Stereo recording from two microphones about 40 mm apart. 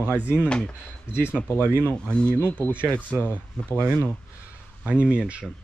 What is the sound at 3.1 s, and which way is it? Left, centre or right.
Speech, left.